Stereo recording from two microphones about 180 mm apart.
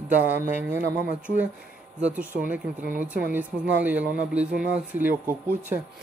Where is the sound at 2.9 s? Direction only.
10° right (ahead or behind).